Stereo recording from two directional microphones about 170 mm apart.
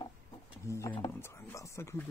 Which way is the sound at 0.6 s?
15° left (ahead or behind).